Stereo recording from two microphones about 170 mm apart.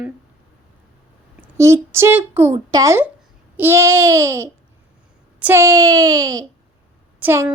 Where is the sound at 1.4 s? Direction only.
15° right (ahead or behind).